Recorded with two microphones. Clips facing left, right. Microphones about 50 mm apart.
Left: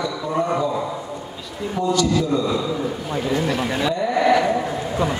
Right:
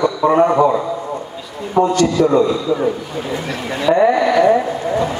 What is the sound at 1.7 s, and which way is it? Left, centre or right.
Speech, right.